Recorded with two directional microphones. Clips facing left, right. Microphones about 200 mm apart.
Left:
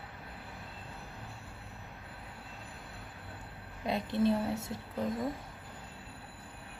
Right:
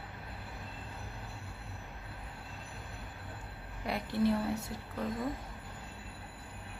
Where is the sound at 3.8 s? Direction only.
20° left (ahead or behind).